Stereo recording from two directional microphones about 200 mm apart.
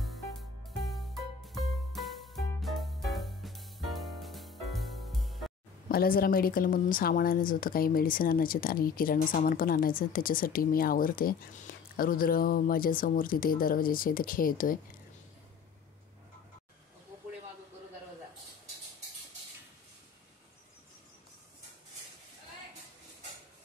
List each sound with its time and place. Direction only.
0.0 s music: centre (ahead or behind)
5.9 s speech: 45° left (ahead or behind)